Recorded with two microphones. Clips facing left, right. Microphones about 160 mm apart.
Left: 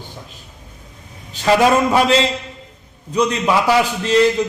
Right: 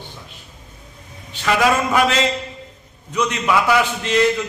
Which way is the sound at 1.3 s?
30° left (ahead or behind).